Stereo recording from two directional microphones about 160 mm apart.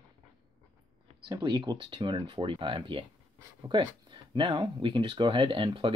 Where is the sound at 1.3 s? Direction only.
30° right (ahead or behind).